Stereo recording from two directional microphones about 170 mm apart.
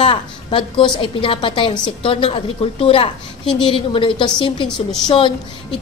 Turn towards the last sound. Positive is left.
turn(degrees=30)  # may be behind; listen again after turning